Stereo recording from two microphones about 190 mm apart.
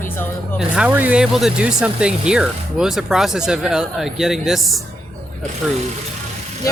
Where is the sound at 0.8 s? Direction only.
10° right (ahead or behind).